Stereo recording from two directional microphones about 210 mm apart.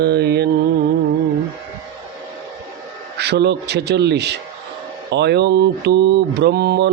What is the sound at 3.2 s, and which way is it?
Speech, 50° right (ahead or behind).